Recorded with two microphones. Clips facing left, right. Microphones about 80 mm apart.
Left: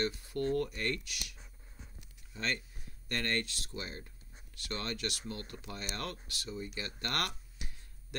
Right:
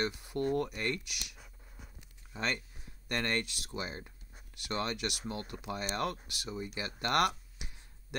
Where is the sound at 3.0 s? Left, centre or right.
Centre.